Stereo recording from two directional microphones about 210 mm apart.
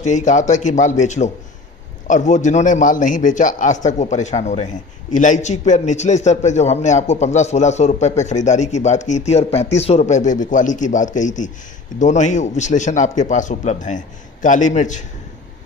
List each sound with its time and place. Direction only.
0.0 s a man's voice: 35° left (ahead or behind)